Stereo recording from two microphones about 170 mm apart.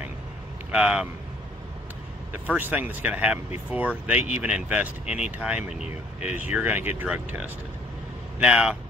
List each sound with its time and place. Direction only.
0.7 s speech: 5° right (ahead or behind)
2.3 s speech: 10° right (ahead or behind)
5.7 s speech: 40° left (ahead or behind)
6.2 s speech: 10° right (ahead or behind)